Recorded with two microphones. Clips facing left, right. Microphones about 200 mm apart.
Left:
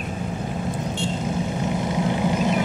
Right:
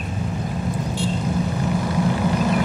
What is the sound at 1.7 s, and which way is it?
Vehicle, 20° left (ahead or behind).